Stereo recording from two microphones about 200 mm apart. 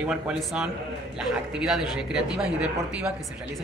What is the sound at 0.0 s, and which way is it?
Speech, 5° right (ahead or behind).